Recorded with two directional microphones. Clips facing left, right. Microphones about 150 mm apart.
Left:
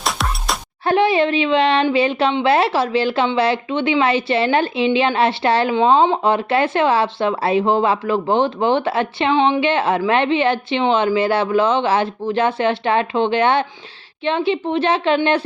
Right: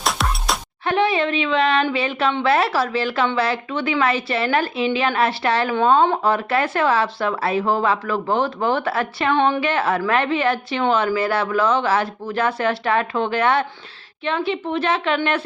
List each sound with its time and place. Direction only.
0.0 s music: centre (ahead or behind)
0.9 s a woman's voice: 30° left (ahead or behind)
9.6 s speech: 25° left (ahead or behind)